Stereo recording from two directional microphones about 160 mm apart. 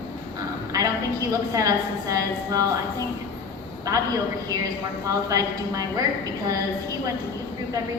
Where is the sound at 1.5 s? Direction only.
20° right (ahead or behind).